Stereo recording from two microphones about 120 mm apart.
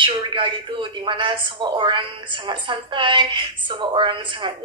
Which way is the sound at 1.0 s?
45° right (ahead or behind).